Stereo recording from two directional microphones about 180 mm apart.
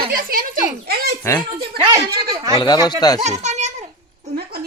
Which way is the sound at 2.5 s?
20° left (ahead or behind).